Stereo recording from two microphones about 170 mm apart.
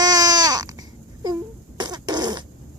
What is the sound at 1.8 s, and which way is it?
Fart, 25° right (ahead or behind).